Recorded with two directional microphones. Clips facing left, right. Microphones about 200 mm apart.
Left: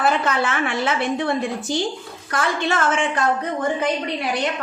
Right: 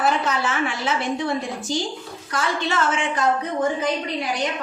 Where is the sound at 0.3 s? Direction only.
60° left (ahead or behind).